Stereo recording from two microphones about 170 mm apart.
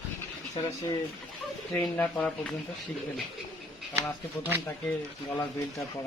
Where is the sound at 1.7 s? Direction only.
10° left (ahead or behind).